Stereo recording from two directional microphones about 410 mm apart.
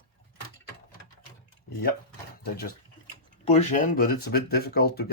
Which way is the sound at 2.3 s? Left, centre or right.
Left.